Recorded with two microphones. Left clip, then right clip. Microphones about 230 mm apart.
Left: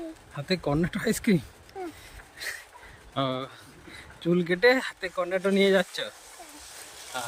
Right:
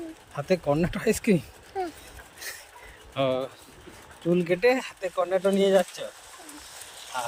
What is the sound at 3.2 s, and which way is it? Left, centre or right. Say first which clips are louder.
Speech: right 4 dB; centre.